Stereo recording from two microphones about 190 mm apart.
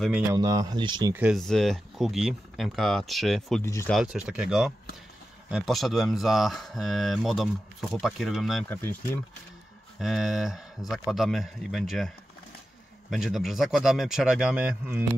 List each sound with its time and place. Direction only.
0.3 s speech: 20° right (ahead or behind)
1.1 s speech: 5° right (ahead or behind)
3.6 s speech: 15° left (ahead or behind)
3.9 s speech: 5° right (ahead or behind)
8.6 s speech: 10° left (ahead or behind)
9.9 s speech: centre (ahead or behind)
13.1 s speech: centre (ahead or behind)